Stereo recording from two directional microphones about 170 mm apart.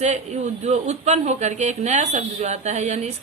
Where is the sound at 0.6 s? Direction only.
40° right (ahead or behind).